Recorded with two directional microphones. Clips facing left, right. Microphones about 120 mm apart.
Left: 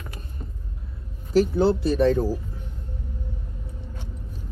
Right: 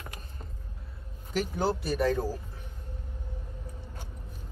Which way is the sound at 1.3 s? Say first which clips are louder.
Left 10 dB; 30° left (ahead or behind).